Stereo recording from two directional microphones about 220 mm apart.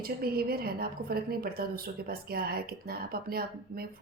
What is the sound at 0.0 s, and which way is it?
A woman's voice, 45° right (ahead or behind).